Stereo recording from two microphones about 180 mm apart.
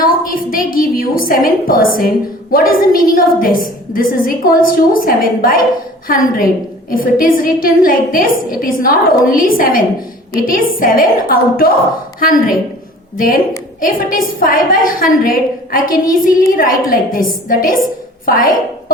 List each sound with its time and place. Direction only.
0.0 s a woman's voice: 50° left (ahead or behind)